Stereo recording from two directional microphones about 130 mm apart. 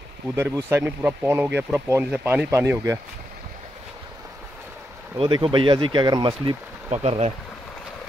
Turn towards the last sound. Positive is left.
turn(degrees=-55)  # may be behind; listen again after turning